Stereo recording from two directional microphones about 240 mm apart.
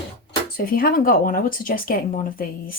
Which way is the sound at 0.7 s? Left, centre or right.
Left.